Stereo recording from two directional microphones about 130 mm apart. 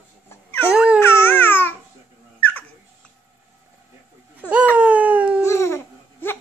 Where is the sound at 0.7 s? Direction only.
10° right (ahead or behind).